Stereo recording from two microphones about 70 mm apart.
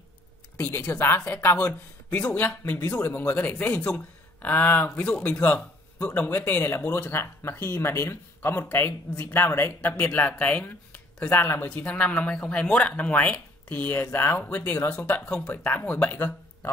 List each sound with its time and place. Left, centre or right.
0.6 s speech: left
11.7 s speech: centre